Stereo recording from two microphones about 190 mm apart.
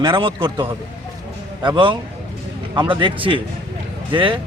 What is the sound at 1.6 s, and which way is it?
A man's voice, 25° right (ahead or behind).